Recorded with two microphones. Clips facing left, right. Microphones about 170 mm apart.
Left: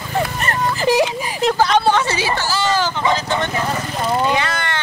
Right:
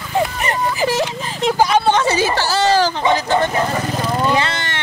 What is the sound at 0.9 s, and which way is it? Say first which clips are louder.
Speech: left 4 dB; 15° left (ahead or behind).